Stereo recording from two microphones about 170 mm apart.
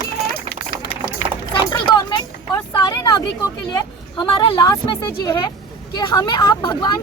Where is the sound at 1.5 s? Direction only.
25° left (ahead or behind).